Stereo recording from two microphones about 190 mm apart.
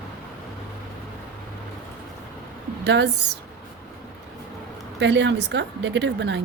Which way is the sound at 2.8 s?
65° right (ahead or behind).